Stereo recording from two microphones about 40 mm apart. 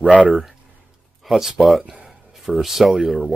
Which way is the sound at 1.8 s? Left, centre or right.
Centre.